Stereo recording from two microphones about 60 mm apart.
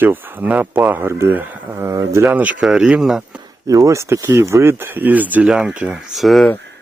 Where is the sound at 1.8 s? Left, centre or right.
Right.